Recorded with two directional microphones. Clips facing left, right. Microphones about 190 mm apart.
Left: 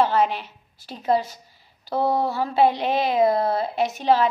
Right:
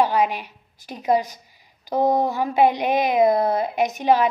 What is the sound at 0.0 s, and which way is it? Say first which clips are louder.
A woman's voice: even; 15° right (ahead or behind).